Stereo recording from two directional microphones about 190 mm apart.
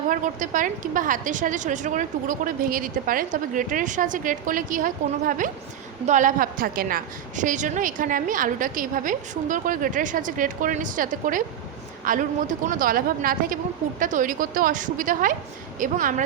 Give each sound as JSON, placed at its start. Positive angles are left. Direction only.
{"t": 0.1, "sound": "a woman's voice", "side_deg": -45}